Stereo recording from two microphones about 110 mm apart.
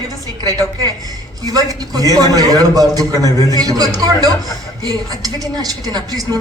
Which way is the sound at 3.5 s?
35° right (ahead or behind).